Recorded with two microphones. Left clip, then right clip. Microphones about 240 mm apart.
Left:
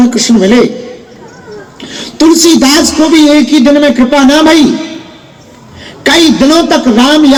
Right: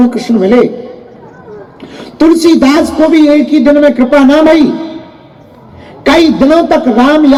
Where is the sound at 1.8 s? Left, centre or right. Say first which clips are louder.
Left 1 dB; left.